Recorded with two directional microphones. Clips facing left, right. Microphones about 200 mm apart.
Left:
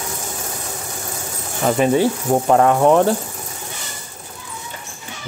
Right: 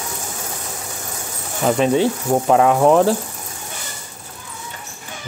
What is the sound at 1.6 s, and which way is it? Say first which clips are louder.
Speech: even; 5° left (ahead or behind).